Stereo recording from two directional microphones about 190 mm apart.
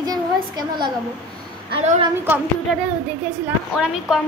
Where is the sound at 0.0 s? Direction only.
20° right (ahead or behind).